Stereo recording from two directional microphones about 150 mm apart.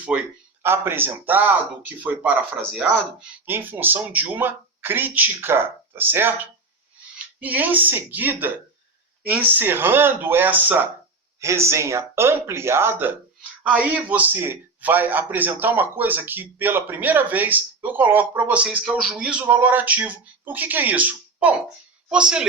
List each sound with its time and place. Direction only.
0.0 s a man's voice: 10° right (ahead or behind)